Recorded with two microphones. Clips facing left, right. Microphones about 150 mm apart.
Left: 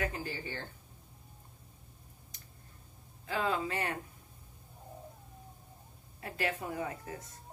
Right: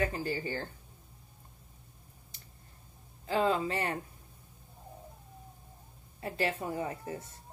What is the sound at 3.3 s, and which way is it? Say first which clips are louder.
Speech: right 4 dB; 30° right (ahead or behind).